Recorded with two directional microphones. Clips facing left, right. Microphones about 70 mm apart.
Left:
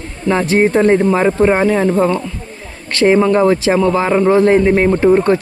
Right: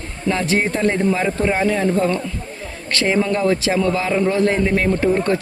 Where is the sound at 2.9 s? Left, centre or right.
Left.